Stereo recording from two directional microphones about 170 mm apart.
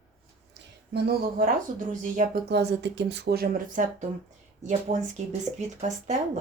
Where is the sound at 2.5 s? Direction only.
75° right (ahead or behind); by 3.8 s 60° right (ahead or behind).